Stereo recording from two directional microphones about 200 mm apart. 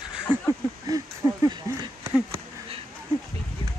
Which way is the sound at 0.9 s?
20° right (ahead or behind).